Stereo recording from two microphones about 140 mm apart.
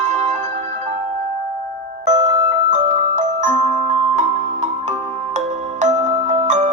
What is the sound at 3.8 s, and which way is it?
Music, 50° right (ahead or behind).